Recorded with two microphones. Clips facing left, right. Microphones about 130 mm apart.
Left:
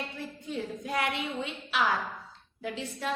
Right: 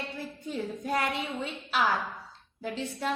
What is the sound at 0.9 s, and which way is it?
Speech, 40° right (ahead or behind).